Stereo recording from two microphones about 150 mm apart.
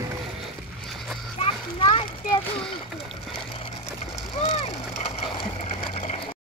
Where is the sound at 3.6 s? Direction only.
40° left (ahead or behind).